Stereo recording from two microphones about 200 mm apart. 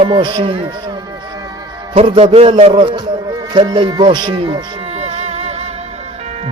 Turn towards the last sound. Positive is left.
turn(degrees=-30)  # may be behind; listen again after turning